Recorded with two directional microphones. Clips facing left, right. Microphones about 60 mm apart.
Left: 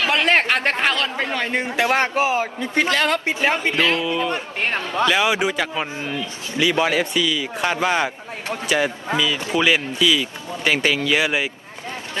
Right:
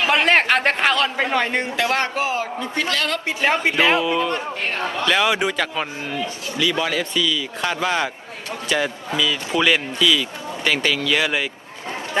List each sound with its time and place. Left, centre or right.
0.1 s a man's voice: centre
1.7 s a man's voice: left
3.6 s a man's voice: centre
6.6 s a man's voice: left; by 11.4 s centre